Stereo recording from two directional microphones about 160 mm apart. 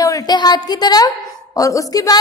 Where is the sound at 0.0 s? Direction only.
20° left (ahead or behind).